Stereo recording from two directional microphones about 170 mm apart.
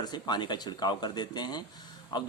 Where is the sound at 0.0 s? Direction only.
25° left (ahead or behind).